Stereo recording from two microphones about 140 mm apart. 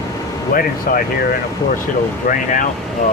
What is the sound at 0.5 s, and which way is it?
Speech, 90° left.